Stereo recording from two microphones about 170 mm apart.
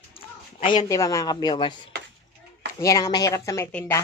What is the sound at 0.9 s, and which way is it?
A woman's voice, 20° left (ahead or behind).